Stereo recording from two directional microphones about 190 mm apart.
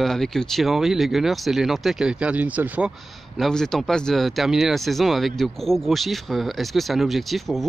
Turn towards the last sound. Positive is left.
turn(degrees=0)  # may be behind; listen again after turning